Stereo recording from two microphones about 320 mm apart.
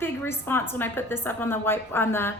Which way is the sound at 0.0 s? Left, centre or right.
Centre.